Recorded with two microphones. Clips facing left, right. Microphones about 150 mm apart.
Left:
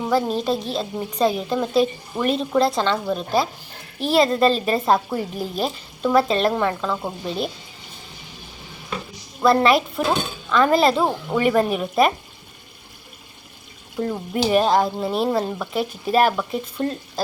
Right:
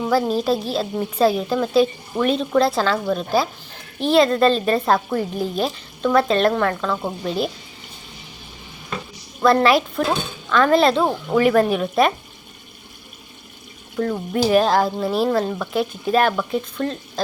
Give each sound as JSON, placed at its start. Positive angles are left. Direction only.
{"t": 0.1, "sound": "speech", "side_deg": -5}
{"t": 9.4, "sound": "speech", "side_deg": 0}
{"t": 14.5, "sound": "speech", "side_deg": 0}